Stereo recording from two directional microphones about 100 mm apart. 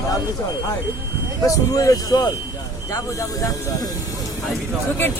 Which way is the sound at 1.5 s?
35° left (ahead or behind).